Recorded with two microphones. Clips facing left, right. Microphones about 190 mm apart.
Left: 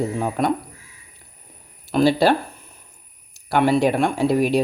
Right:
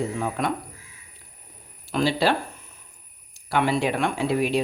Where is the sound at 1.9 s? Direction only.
45° left (ahead or behind).